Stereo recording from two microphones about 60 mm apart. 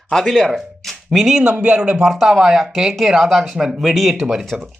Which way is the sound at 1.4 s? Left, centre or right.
Centre.